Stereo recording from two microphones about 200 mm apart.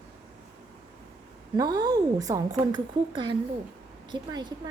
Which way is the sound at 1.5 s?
20° right (ahead or behind).